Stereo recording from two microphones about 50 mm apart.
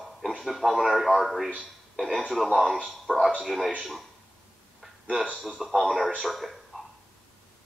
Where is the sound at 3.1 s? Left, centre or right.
Right.